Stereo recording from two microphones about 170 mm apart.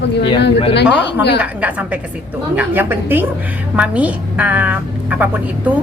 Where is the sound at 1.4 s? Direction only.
10° right (ahead or behind).